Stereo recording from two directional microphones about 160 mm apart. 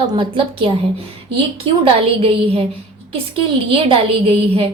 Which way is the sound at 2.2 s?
35° right (ahead or behind).